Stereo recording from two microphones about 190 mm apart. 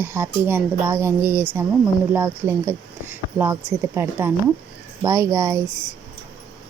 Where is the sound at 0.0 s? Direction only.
10° right (ahead or behind).